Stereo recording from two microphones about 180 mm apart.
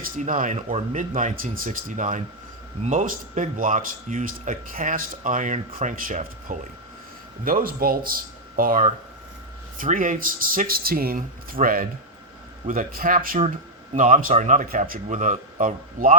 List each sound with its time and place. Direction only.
0.0 s speech: 50° right (ahead or behind)